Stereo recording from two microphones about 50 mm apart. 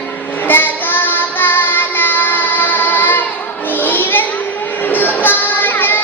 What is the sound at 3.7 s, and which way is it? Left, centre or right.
Children playing, left.